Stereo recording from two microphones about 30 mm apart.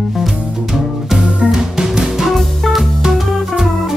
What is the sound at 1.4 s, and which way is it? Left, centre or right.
Music, centre.